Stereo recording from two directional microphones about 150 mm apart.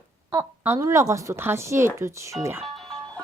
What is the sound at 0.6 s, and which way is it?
Speech, 15° right (ahead or behind).